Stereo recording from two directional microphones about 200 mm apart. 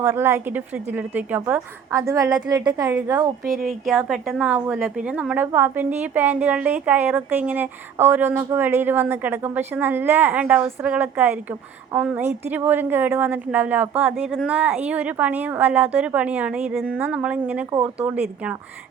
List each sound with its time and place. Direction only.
0.0 s a woman's voice: 10° right (ahead or behind)
3.5 s a woman's voice: centre (ahead or behind)